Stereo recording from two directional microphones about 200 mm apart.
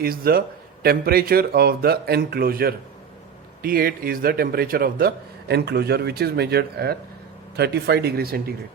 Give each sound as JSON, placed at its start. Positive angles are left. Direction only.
{"t": 0.0, "sound": "speech", "side_deg": -50}